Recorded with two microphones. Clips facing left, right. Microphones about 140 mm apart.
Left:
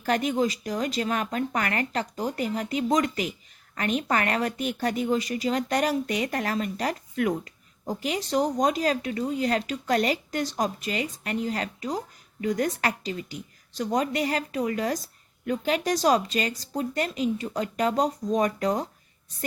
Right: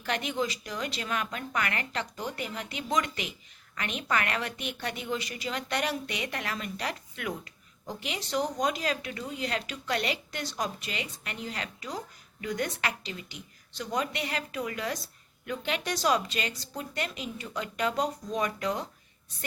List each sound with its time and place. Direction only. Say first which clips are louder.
0.0 s a woman's voice: left 7 dB; 40° left (ahead or behind)